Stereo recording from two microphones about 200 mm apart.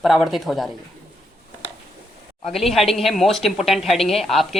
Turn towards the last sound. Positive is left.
turn(degrees=0)  # may be behind; listen again after turning